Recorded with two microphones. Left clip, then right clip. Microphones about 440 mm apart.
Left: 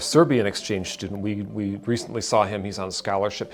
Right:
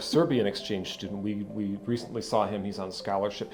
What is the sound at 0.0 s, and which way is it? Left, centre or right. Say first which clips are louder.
Speech: left 6 dB; left.